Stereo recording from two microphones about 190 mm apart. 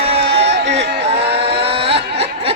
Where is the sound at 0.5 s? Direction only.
65° right (ahead or behind).